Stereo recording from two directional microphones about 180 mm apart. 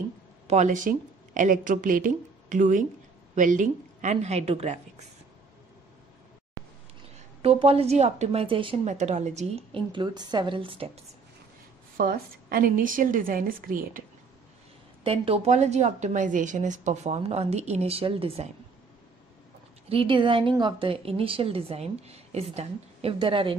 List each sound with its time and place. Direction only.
0.5 s a woman's voice: 45° right (ahead or behind)
7.4 s speech: 30° right (ahead or behind)
8.8 s speech: 40° right (ahead or behind)
12.0 s a woman's voice: 55° right (ahead or behind)
15.0 s speech: 30° right (ahead or behind)
19.9 s speech: 30° right (ahead or behind)